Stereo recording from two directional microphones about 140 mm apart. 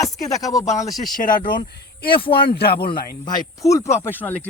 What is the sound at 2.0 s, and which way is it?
Speech, 40° left (ahead or behind).